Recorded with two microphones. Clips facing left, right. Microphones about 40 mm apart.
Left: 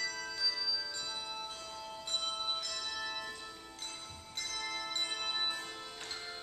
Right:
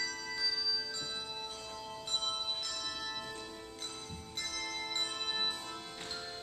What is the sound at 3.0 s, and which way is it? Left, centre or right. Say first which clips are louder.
Music: left 1 dB; centre.